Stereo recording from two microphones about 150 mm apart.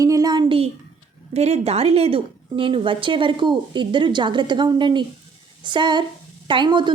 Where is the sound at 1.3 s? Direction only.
45° right (ahead or behind).